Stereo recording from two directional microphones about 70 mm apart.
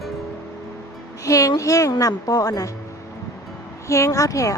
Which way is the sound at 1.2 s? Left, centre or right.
Left.